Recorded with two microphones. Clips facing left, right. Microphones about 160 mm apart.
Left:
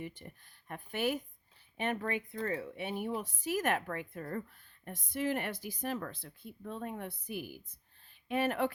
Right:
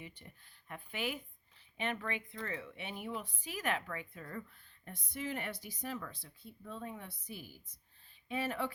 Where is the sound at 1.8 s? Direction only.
40° left (ahead or behind).